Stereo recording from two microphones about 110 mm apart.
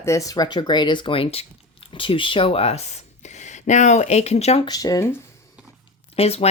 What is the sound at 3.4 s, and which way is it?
Speech, 90° left.